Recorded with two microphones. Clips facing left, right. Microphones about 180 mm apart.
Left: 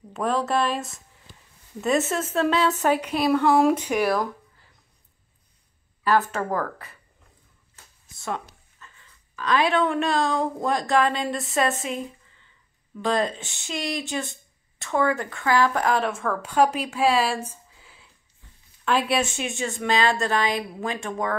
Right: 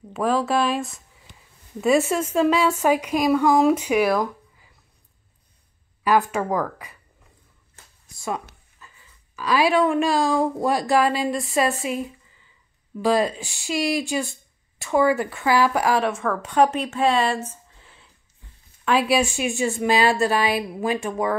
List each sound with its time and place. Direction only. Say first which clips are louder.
0.1 s a woman's voice: right 3 dB; centre (ahead or behind)
6.0 s a woman's voice: right 2 dB; 15° right (ahead or behind)
8.2 s a woman's voice: right 2 dB; 10° right (ahead or behind); by 17.4 s 5° left (ahead or behind)
17.5 s a sound: right 2 dB; 5° left (ahead or behind)
18.9 s a woman's voice: right 3 dB; 5° right (ahead or behind)